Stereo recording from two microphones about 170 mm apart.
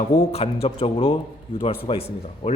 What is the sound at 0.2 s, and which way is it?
A man's voice, 35° left (ahead or behind).